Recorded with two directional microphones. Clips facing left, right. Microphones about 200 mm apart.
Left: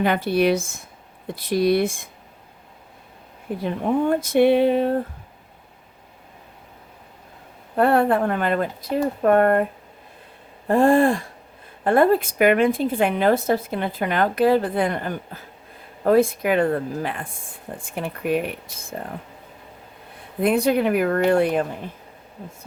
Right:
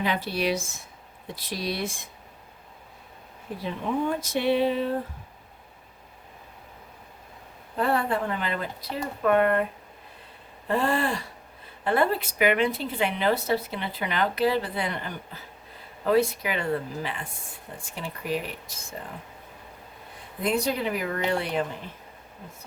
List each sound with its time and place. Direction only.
0.0 s speech: 55° left (ahead or behind)
3.6 s speech: 55° left (ahead or behind)
7.8 s a woman's voice: 60° left (ahead or behind)
10.7 s a woman's voice: 45° left (ahead or behind)
20.4 s speech: 60° left (ahead or behind)